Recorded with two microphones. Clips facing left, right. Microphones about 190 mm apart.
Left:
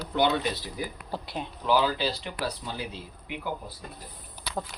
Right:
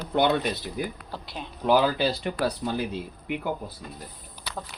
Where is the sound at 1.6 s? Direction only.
55° right (ahead or behind).